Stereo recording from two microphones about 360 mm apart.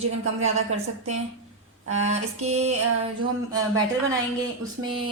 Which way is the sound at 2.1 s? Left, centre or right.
Centre.